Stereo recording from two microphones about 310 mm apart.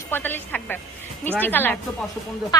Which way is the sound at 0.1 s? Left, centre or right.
Centre.